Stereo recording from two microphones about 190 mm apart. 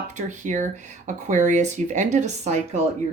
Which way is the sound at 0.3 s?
40° right (ahead or behind).